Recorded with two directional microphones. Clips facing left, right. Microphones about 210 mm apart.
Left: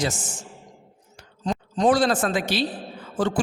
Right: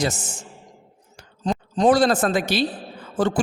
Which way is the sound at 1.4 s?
40° right (ahead or behind).